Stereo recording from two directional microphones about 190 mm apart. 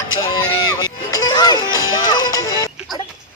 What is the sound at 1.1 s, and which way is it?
Music, 20° left (ahead or behind).